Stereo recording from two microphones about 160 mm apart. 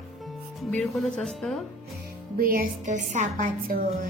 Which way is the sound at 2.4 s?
65° right (ahead or behind).